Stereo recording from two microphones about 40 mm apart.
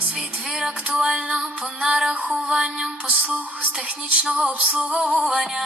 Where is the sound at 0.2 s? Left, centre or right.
Centre.